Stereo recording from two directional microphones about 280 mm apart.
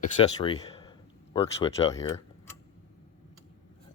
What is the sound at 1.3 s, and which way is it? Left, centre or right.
Speech, centre.